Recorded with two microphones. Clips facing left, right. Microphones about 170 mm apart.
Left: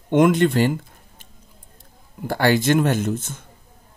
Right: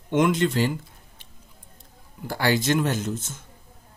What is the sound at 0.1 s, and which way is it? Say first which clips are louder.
Speech: left 5 dB; 55° left (ahead or behind).